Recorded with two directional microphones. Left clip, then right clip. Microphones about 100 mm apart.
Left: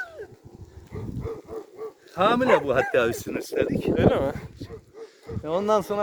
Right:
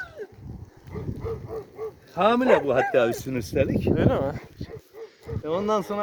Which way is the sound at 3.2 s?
60° left (ahead or behind).